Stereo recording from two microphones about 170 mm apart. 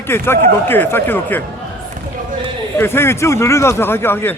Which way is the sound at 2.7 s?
15° left (ahead or behind).